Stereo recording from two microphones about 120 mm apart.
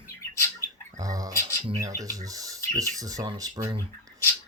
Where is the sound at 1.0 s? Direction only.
30° right (ahead or behind).